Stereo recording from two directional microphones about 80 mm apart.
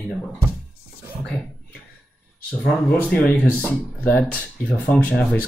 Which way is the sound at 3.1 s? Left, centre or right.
Centre.